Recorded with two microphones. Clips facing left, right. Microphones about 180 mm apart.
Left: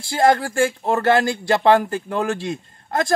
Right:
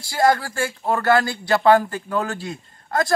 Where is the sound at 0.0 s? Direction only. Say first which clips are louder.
Left 2 dB; 25° left (ahead or behind).